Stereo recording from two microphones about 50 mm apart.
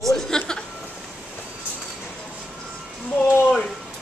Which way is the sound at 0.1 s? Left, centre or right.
Centre.